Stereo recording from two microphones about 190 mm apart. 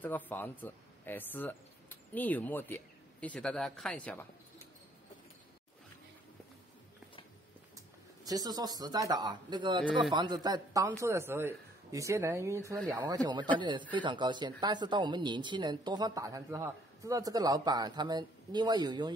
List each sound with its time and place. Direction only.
0.0 s speech: 10° left (ahead or behind)
7.7 s a woman's voice: 20° right (ahead or behind)